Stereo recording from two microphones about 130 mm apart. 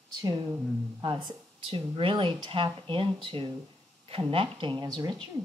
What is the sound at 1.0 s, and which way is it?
Speech, 40° right (ahead or behind).